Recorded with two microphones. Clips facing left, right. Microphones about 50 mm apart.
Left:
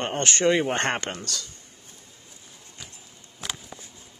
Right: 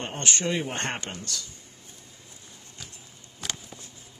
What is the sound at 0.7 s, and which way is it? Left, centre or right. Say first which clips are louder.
Speech: left 6 dB; left.